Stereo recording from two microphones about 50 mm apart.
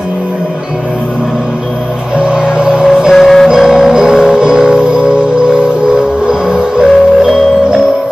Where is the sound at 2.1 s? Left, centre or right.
Centre.